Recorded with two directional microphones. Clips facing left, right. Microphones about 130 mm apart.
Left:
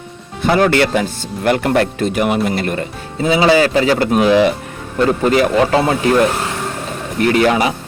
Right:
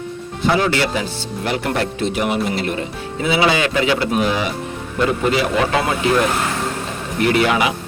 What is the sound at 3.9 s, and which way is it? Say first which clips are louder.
Speech: left 4 dB; 45° left (ahead or behind).